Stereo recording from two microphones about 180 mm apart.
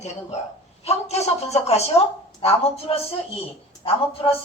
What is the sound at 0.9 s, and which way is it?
A woman's voice, 35° left (ahead or behind).